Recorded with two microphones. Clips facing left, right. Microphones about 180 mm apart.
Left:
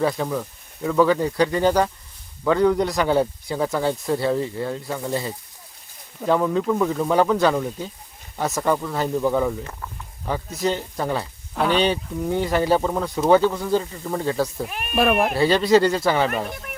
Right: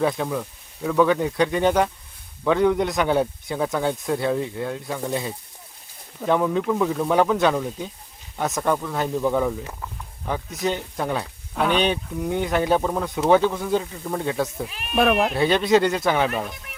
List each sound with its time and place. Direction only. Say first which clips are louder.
0.0 s speech: even; centre (ahead or behind)
14.7 s speech: left 6 dB; 55° left (ahead or behind)
14.9 s speech: even; centre (ahead or behind)